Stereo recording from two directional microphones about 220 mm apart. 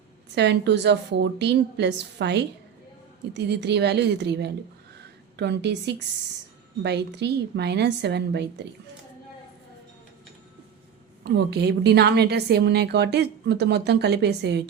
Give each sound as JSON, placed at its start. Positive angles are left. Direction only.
{"t": 0.3, "sound": "a woman's voice", "side_deg": -50}
{"t": 11.2, "sound": "a woman's voice", "side_deg": -50}